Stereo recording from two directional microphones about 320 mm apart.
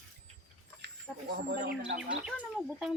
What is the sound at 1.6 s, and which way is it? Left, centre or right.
Speech, right.